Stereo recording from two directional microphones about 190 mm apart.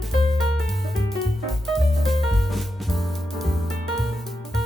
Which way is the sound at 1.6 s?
Centre (ahead or behind).